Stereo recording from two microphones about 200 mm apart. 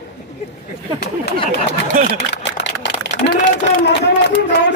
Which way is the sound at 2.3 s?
60° left (ahead or behind).